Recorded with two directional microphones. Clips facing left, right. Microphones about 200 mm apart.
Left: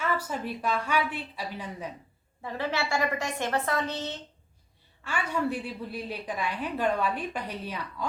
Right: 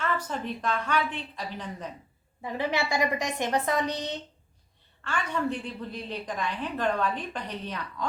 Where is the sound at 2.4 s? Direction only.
15° right (ahead or behind).